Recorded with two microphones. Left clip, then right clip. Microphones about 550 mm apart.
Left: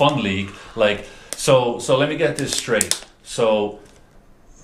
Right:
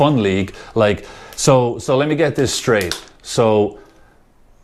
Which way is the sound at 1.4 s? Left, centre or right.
Right.